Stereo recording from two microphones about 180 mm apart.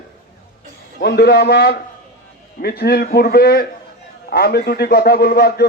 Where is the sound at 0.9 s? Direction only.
60° left (ahead or behind).